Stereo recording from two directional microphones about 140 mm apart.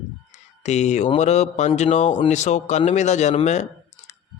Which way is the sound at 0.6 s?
55° left (ahead or behind).